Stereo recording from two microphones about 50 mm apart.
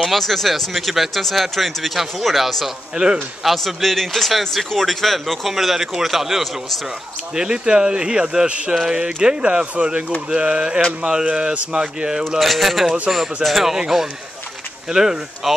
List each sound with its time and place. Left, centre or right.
0.0 s speech: centre
7.3 s speech: centre
12.3 s speech: centre